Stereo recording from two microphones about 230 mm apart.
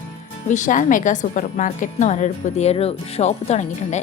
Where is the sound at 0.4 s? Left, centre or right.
Left.